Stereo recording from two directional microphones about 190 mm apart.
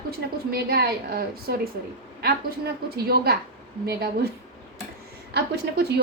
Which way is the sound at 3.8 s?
55° right (ahead or behind).